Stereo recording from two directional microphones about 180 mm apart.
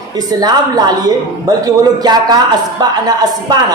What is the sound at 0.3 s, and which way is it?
A man's voice, 20° right (ahead or behind).